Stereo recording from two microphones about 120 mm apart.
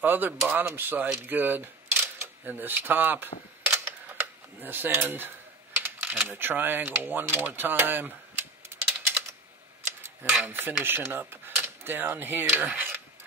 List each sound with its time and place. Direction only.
0.0 s speech: 15° right (ahead or behind)
3.6 s camera: 20° right (ahead or behind)
5.8 s mechanisms: 15° right (ahead or behind)
10.4 s speech: 20° right (ahead or behind)